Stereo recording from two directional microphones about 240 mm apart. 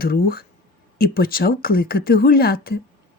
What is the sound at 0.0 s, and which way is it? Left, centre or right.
Speech, left.